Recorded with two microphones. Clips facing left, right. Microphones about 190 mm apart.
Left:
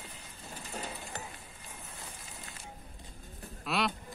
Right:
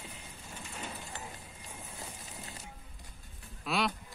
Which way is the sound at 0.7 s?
35° left (ahead or behind).